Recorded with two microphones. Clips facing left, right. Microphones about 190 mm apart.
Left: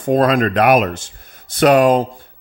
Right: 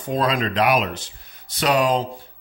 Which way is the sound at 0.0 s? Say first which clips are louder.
Left 8 dB; 50° left (ahead or behind).